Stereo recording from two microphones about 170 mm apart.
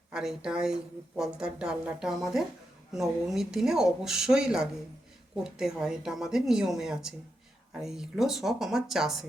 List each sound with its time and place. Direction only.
0.1 s a woman's voice: 5° right (ahead or behind)